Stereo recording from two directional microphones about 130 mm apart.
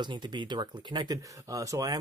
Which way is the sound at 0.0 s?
35° right (ahead or behind).